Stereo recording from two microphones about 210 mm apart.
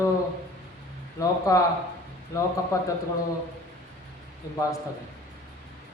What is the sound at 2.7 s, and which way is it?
Speech, 15° left (ahead or behind).